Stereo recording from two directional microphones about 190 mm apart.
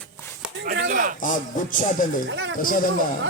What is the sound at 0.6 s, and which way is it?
Speech, 55° right (ahead or behind).